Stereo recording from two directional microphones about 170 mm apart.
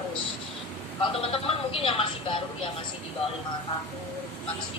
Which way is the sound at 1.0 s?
35° left (ahead or behind).